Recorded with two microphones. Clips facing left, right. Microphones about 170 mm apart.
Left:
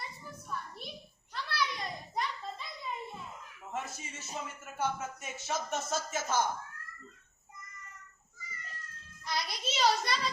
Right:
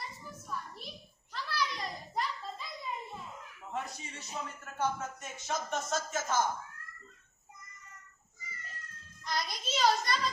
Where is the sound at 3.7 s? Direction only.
5° left (ahead or behind).